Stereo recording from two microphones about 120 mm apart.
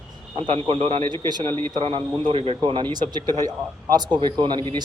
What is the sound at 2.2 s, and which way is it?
Speech, 50° right (ahead or behind).